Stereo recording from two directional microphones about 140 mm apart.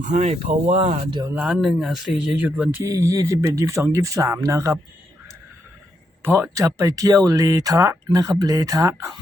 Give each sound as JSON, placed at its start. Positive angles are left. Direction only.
{"t": 0.1, "sound": "speech", "side_deg": -55}
{"t": 1.2, "sound": "speech", "side_deg": -10}
{"t": 2.4, "sound": "speech", "side_deg": -10}
{"t": 2.9, "sound": "speech", "side_deg": -20}
{"t": 6.2, "sound": "speech", "side_deg": -15}